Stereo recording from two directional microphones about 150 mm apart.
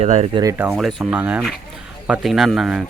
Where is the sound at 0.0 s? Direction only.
45° right (ahead or behind).